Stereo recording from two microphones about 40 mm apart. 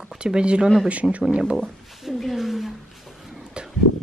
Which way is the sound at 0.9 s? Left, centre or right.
Right.